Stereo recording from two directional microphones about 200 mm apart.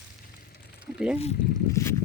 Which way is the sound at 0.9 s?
5° right (ahead or behind).